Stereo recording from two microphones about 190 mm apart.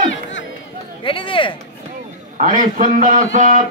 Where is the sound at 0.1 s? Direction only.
75° left (ahead or behind).